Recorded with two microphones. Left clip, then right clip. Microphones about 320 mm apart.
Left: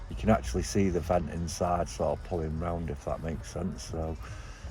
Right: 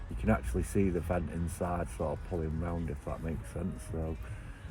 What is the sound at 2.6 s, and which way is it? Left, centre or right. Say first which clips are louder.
Speech: left 5 dB; left.